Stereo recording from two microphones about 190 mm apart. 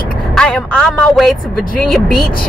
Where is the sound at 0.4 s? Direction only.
10° left (ahead or behind).